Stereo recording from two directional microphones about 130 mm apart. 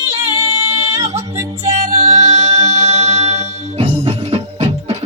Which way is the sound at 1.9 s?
60° right (ahead or behind).